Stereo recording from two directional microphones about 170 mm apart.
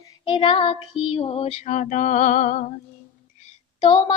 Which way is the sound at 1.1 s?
35° left (ahead or behind).